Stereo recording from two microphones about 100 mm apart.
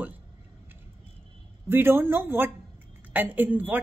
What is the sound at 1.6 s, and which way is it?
A woman's voice, 20° right (ahead or behind).